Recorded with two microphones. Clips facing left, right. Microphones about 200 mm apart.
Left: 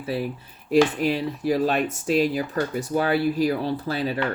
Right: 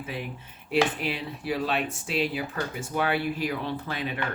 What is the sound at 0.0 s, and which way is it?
Speech, 35° left (ahead or behind).